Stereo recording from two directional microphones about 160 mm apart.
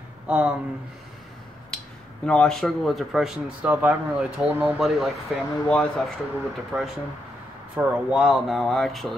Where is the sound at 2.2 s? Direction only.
5° left (ahead or behind).